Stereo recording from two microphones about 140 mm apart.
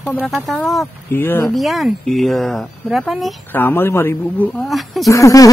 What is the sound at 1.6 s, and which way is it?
Speech, centre (ahead or behind).